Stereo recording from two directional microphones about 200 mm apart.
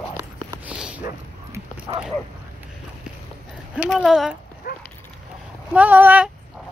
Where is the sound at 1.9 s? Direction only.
25° right (ahead or behind).